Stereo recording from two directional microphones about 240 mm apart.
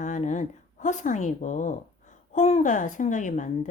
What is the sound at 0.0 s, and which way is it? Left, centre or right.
A woman's voice, left.